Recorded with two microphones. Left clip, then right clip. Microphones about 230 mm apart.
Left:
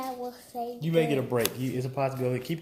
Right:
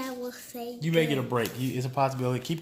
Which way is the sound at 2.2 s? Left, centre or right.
Right.